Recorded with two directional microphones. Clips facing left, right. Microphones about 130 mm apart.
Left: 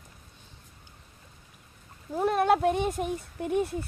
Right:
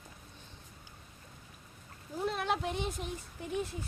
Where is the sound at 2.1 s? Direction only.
55° left (ahead or behind).